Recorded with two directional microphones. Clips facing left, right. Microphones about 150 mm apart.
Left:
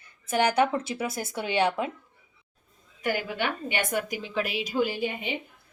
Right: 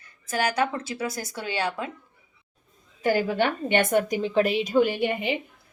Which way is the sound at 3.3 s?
50° right (ahead or behind).